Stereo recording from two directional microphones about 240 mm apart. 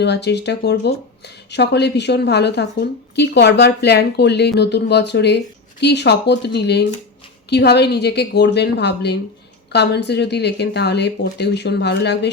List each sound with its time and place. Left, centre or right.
0.0 s speech: left